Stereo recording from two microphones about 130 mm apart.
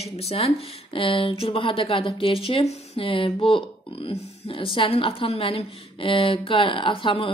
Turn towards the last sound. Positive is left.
turn(degrees=40)  # may be behind; listen again after turning